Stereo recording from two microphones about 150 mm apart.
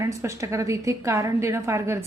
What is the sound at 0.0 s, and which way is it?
Speech, 20° right (ahead or behind).